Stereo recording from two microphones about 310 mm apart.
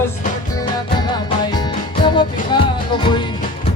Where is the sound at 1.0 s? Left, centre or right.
Centre.